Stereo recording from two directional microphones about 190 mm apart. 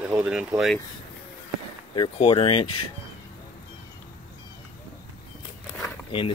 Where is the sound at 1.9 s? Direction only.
25° left (ahead or behind).